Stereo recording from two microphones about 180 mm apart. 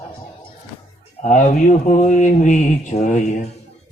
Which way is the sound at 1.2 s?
45° left (ahead or behind).